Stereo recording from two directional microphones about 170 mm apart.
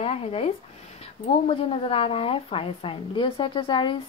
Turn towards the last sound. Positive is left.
turn(degrees=30)  # may be behind; listen again after turning